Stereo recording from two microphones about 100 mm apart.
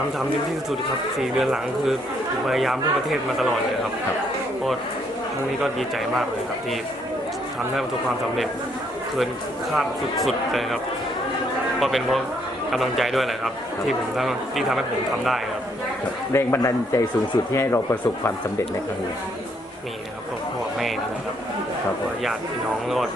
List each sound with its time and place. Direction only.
1.2 s a man's voice: 5° right (ahead or behind)
9.7 s a man's voice: centre (ahead or behind)
11.8 s a man's voice: centre (ahead or behind)
16.3 s a man's voice: 30° left (ahead or behind)